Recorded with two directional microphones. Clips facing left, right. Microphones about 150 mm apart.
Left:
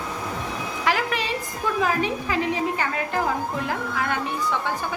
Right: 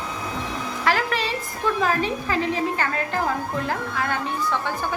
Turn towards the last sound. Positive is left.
turn(degrees=10)  # may be behind; listen again after turning